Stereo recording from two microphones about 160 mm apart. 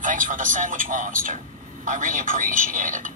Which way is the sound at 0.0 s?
55° right (ahead or behind).